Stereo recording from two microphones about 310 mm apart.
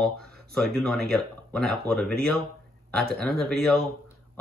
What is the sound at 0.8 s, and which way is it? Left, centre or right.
Speech, centre.